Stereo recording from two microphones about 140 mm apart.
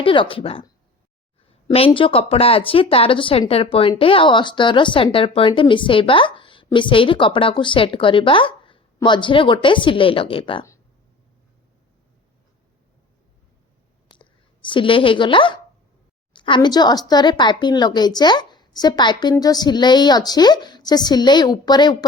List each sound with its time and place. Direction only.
0.0 s speech: 40° left (ahead or behind)
1.7 s speech: 40° left (ahead or behind)
14.1 s a sound: 35° left (ahead or behind)
16.6 s a woman's voice: 30° left (ahead or behind)